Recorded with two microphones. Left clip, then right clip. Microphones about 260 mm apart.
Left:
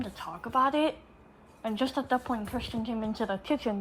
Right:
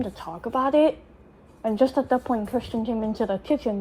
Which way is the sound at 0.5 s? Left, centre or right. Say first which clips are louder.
Right 6 dB; centre.